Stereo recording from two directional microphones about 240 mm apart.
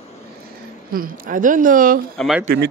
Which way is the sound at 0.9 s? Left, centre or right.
Right.